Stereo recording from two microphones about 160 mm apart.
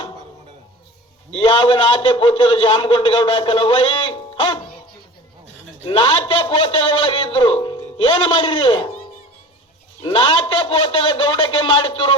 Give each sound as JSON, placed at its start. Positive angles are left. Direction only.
{"t": 1.3, "sound": "a man's voice", "side_deg": 30}
{"t": 5.8, "sound": "a man's voice", "side_deg": 30}
{"t": 10.0, "sound": "a man's voice", "side_deg": 30}